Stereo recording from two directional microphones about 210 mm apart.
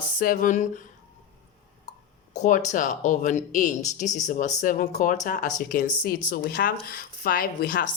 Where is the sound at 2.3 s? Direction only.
35° left (ahead or behind).